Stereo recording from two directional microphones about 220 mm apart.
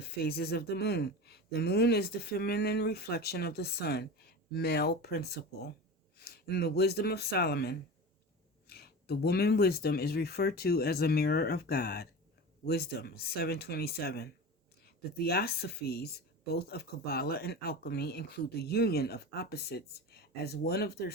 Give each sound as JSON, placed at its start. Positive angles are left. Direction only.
{"t": 0.0, "sound": "speech", "side_deg": 45}